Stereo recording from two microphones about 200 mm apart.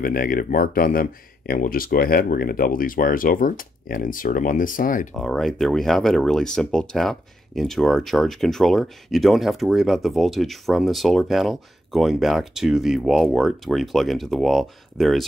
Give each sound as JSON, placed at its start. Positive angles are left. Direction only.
{"t": 0.0, "sound": "speech", "side_deg": 45}
{"t": 5.1, "sound": "speech", "side_deg": 0}